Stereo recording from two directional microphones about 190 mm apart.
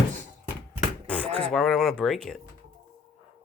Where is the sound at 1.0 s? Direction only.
5° left (ahead or behind).